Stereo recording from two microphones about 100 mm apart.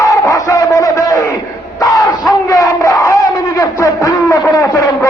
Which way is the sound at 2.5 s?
35° left (ahead or behind).